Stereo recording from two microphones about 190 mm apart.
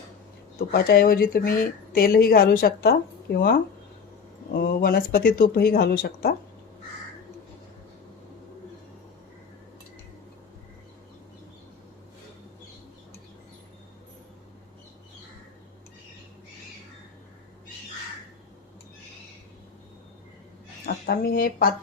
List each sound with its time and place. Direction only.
0.7 s a woman's voice: 55° left (ahead or behind)
20.8 s speech: 50° left (ahead or behind)